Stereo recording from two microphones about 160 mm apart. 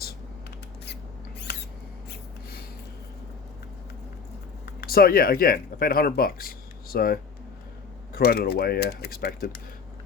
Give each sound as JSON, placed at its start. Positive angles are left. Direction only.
{"t": 2.0, "sound": "gasp", "side_deg": 75}
{"t": 4.6, "sound": "speech", "side_deg": 70}